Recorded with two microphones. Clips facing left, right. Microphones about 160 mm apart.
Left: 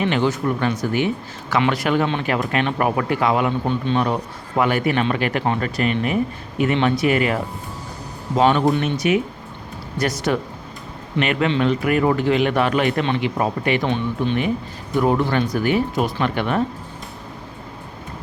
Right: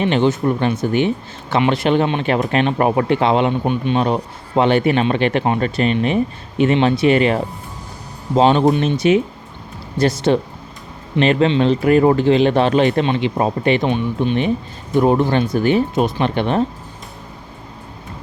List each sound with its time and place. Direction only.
0.0 s speech: 25° right (ahead or behind)